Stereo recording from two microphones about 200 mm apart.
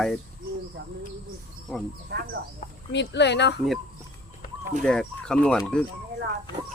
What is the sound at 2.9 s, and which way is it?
Speech, 60° left (ahead or behind).